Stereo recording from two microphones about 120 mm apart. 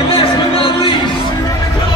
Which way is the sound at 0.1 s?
50° left (ahead or behind).